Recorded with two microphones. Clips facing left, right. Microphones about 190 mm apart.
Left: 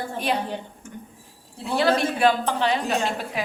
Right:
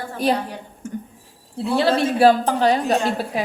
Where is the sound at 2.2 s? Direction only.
40° right (ahead or behind).